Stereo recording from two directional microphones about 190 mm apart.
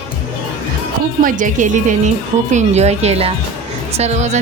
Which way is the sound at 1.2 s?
40° right (ahead or behind).